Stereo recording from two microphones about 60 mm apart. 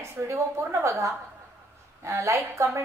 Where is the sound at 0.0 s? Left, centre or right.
Right.